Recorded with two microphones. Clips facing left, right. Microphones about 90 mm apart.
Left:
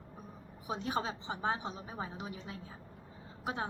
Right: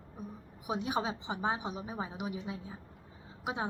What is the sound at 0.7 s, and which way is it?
A woman's voice, 15° right (ahead or behind).